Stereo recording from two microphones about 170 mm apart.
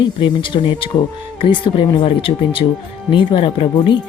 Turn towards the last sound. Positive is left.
turn(degrees=25)  # may be behind; listen again after turning